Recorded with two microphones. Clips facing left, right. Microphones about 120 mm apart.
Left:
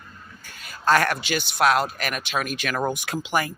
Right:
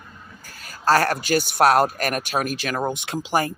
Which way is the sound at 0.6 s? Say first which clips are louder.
Right 1 dB; 40° right (ahead or behind).